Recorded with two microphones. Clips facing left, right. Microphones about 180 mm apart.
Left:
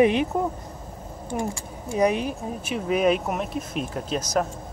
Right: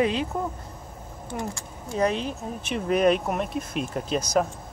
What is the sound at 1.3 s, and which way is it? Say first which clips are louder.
Speech: left 4 dB; 10° left (ahead or behind).